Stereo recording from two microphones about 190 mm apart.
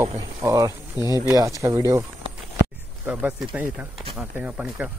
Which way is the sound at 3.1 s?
5° right (ahead or behind).